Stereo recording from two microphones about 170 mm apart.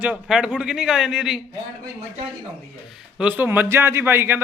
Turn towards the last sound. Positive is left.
turn(degrees=-10)  # may be behind; listen again after turning